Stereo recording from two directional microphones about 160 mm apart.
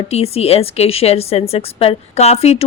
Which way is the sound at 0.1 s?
40° left (ahead or behind).